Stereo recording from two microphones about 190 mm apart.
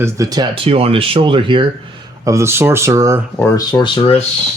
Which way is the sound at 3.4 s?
20° left (ahead or behind).